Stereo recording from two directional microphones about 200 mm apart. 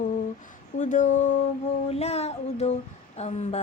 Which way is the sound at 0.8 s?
40° left (ahead or behind).